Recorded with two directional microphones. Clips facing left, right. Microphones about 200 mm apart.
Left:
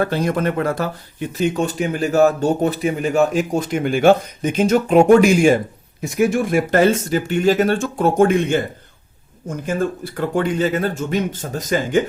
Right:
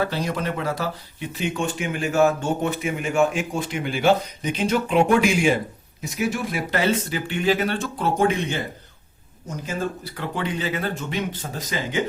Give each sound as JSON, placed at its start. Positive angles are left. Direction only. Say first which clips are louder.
{"t": 0.0, "sound": "speech", "louder": "left 6 dB", "side_deg": 50}